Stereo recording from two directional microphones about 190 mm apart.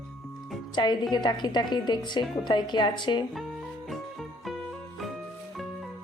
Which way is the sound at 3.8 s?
Centre (ahead or behind).